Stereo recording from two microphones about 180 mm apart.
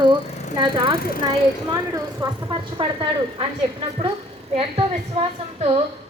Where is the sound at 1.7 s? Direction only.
15° right (ahead or behind).